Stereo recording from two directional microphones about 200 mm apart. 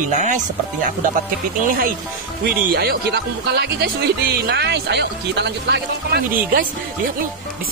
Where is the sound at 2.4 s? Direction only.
50° right (ahead or behind).